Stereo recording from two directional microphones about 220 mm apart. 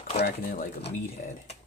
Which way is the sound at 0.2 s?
45° left (ahead or behind).